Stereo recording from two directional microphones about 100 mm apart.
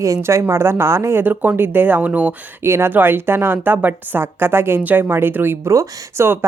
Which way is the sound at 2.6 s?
25° right (ahead or behind).